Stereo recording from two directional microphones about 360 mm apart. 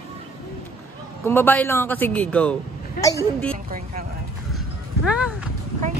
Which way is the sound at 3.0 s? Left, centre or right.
Left.